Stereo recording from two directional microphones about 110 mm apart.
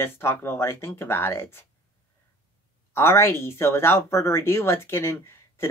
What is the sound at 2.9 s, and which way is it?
Speech, 25° left (ahead or behind).